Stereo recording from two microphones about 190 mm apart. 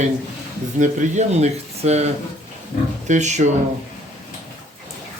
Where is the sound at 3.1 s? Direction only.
40° right (ahead or behind).